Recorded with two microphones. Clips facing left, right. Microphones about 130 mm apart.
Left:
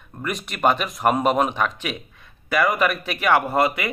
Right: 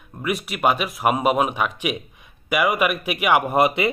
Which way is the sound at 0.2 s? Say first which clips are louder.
Even; 5° right (ahead or behind).